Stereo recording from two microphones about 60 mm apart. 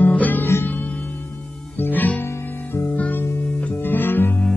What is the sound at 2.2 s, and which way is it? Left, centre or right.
Music, left.